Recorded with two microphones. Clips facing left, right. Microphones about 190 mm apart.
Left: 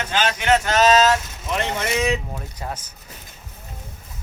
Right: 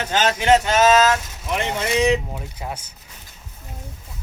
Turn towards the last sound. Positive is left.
turn(degrees=-10)  # may be behind; listen again after turning